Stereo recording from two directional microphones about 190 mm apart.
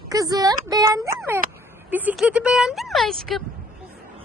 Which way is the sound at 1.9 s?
10° right (ahead or behind).